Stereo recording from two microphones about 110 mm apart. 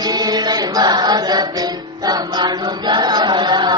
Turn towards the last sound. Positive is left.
turn(degrees=-40)  # may be behind; listen again after turning